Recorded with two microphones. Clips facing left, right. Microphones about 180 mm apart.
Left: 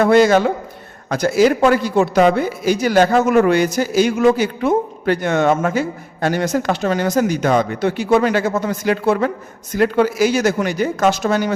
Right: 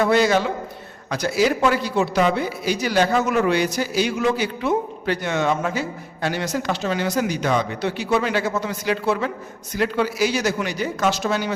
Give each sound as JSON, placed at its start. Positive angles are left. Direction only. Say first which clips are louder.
{"t": 0.0, "sound": "a man's voice", "louder": "left 6 dB", "side_deg": 50}